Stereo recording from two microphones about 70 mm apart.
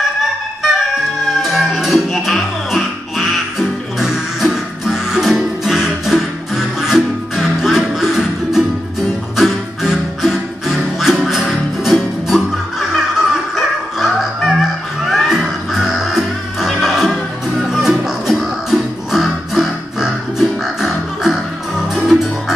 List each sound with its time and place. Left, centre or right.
0.2 s music: centre